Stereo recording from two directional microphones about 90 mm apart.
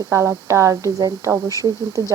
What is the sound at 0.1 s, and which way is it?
Speech, 35° right (ahead or behind).